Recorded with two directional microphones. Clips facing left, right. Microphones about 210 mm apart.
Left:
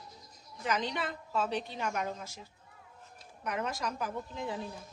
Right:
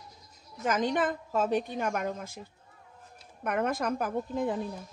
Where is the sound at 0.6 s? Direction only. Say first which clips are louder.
Right 6 dB; 45° right (ahead or behind).